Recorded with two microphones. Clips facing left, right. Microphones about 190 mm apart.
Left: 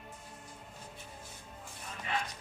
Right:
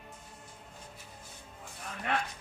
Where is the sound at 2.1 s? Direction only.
65° right (ahead or behind).